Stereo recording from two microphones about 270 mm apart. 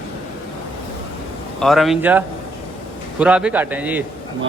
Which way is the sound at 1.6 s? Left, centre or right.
Centre.